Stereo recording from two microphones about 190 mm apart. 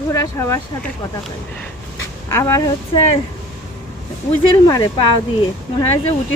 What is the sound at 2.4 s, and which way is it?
Speech, 20° left (ahead or behind).